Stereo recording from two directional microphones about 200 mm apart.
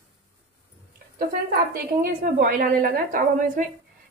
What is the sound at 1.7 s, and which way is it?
A woman's voice, 45° right (ahead or behind).